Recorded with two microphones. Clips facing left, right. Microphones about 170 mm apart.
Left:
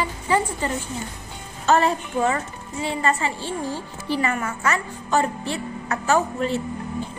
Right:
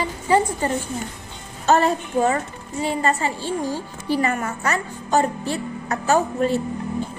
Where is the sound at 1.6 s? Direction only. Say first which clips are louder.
Right 1 dB; 40° right (ahead or behind).